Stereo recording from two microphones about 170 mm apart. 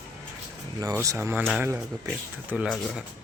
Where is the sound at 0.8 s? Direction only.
20° right (ahead or behind).